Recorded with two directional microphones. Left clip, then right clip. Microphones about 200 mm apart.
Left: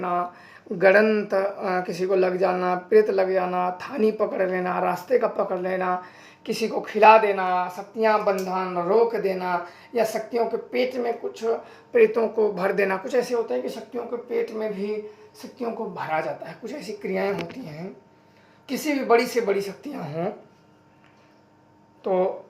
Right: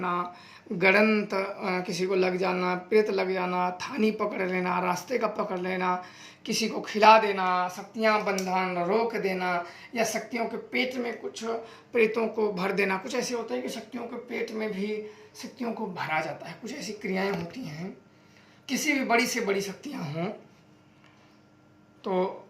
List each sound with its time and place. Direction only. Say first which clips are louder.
0.0 s speech: left 4 dB; 25° right (ahead or behind)
22.0 s speech: left 6 dB; 35° right (ahead or behind)